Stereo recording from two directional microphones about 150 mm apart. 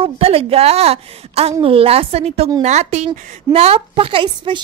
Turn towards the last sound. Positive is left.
turn(degrees=-35)  # may be behind; listen again after turning